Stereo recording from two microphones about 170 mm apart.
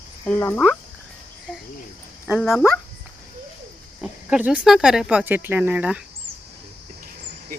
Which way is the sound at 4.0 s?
5° right (ahead or behind).